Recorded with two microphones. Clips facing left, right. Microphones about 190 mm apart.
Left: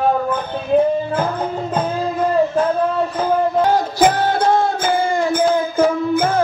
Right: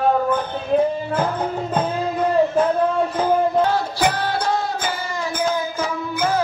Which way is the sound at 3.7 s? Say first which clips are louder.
Left 5 dB; 45° left (ahead or behind).